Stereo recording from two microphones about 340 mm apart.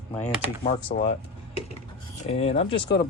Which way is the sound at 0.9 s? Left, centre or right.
Left.